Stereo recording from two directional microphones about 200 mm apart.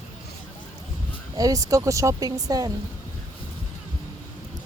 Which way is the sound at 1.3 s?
15° right (ahead or behind).